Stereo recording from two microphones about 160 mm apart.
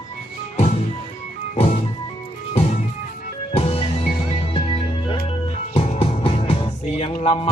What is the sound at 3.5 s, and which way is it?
Music, 35° left (ahead or behind).